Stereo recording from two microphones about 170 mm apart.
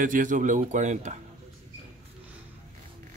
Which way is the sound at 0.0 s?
50° right (ahead or behind).